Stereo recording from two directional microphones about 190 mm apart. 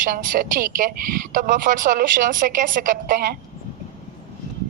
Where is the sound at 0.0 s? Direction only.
45° right (ahead or behind).